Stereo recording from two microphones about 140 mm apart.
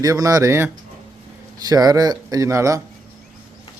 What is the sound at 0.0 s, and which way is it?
A man's voice, 25° right (ahead or behind).